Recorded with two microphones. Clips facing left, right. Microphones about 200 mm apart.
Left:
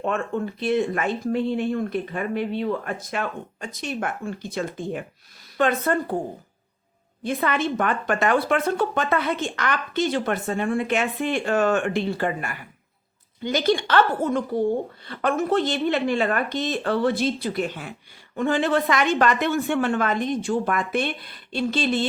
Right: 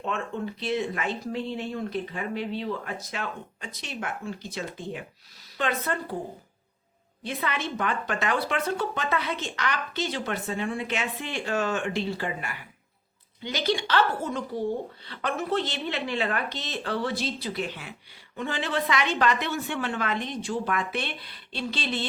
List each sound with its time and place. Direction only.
0.6 s a woman's voice: 50° left (ahead or behind)
7.3 s a woman's voice: 50° left (ahead or behind)